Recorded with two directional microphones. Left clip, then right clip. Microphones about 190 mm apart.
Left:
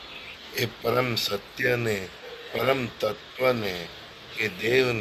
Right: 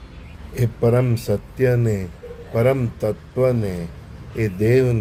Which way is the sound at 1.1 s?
15° right (ahead or behind).